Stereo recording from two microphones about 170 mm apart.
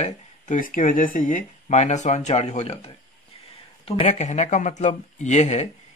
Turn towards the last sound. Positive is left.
turn(degrees=40)  # may be behind; listen again after turning